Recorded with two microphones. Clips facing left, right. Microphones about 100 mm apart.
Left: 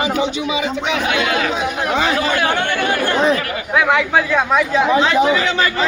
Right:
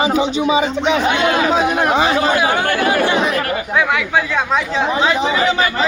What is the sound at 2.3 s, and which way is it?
Speech, 10° right (ahead or behind).